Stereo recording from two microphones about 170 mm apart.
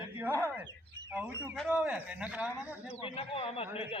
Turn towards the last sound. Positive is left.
turn(degrees=35)  # may be behind; listen again after turning